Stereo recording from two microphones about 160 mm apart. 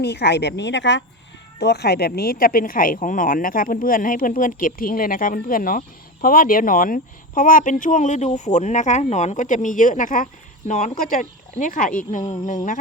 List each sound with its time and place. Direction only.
0.0 s speech: 90° left; by 12.2 s 55° left (ahead or behind)